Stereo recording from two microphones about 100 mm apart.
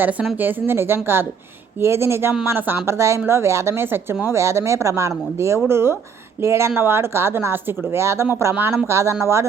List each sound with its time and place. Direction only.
0.0 s speech: 15° right (ahead or behind)